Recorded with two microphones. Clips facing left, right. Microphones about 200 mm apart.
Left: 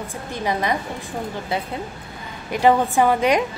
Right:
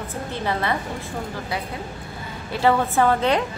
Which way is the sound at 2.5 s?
15° left (ahead or behind).